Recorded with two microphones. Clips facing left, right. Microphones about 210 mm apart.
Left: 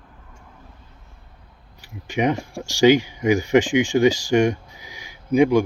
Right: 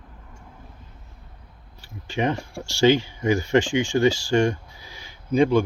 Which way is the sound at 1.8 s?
15° left (ahead or behind).